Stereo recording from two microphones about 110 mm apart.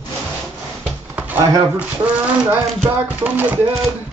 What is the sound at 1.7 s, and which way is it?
Speech, 15° right (ahead or behind).